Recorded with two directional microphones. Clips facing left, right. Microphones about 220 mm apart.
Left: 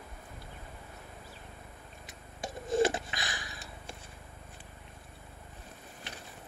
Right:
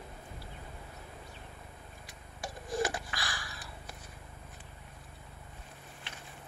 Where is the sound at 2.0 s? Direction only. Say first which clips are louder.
Left 3 dB; 25° left (ahead or behind).